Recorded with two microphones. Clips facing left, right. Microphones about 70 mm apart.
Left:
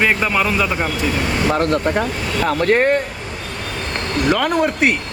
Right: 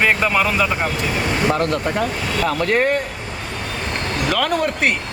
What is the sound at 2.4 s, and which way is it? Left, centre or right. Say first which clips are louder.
Speech: left 4 dB; left.